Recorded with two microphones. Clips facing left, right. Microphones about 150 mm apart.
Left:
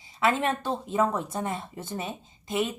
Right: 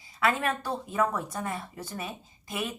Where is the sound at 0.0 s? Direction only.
25° left (ahead or behind).